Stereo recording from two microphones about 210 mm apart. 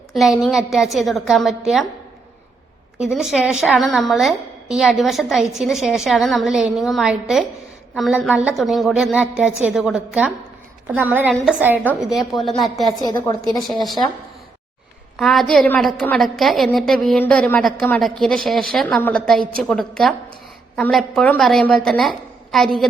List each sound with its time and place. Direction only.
0.1 s a woman's voice: centre (ahead or behind)
3.0 s a woman's voice: 5° right (ahead or behind)
12.9 s a woman's voice: 20° left (ahead or behind)
13.6 s a woman's voice: centre (ahead or behind)
15.1 s a woman's voice: centre (ahead or behind)